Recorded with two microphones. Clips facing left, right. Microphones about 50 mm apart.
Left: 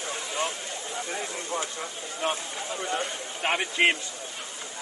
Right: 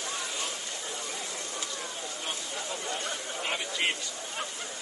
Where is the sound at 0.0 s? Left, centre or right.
Left.